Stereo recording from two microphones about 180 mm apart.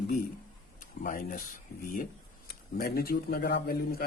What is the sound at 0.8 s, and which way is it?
Speech, 45° left (ahead or behind).